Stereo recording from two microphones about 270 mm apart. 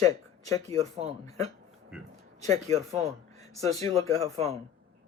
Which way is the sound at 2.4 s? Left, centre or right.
Right.